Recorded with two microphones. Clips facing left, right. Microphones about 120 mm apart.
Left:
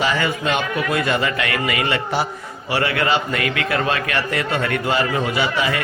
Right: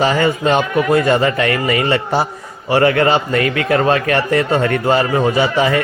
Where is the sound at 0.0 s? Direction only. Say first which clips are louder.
Right 6 dB; 40° right (ahead or behind).